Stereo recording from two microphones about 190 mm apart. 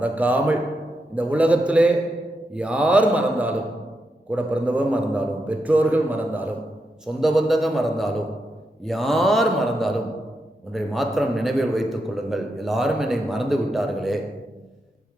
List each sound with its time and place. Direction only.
0.0 s a man's voice: 10° right (ahead or behind)